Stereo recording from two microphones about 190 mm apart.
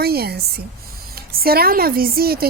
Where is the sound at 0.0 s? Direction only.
55° right (ahead or behind).